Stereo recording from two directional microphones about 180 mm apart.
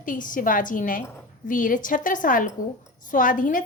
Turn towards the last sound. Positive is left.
turn(degrees=50)  # may be behind; listen again after turning